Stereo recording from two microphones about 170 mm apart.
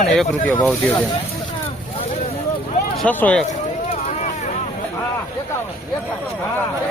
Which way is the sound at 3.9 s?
45° left (ahead or behind).